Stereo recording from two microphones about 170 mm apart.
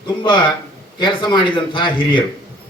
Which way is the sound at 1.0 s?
30° left (ahead or behind).